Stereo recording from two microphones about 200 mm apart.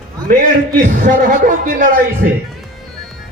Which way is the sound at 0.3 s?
45° right (ahead or behind).